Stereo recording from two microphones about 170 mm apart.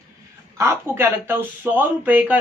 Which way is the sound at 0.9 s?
15° right (ahead or behind).